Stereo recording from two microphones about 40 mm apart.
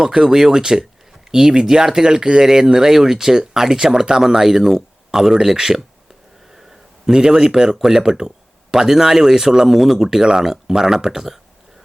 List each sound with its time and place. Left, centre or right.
0.0 s speech: centre
7.0 s speech: centre